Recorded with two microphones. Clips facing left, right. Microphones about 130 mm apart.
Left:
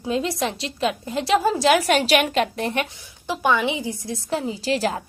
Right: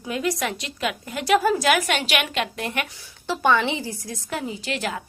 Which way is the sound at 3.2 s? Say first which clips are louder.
Even; 15° left (ahead or behind).